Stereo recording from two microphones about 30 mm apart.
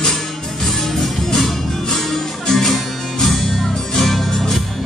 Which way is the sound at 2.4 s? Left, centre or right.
Centre.